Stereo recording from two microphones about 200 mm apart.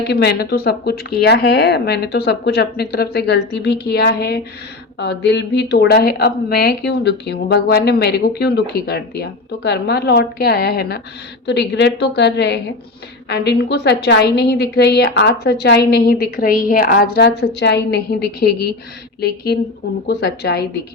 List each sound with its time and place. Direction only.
0.1 s a woman's voice: 55° left (ahead or behind)